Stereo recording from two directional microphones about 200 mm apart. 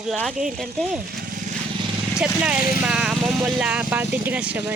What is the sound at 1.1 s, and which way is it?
Vehicle, 45° right (ahead or behind).